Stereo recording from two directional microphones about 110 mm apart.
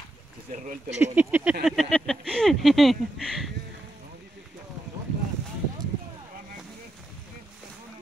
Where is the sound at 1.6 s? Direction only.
Centre (ahead or behind).